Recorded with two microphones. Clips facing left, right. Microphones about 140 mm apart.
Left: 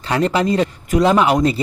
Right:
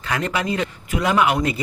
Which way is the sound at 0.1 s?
35° left (ahead or behind).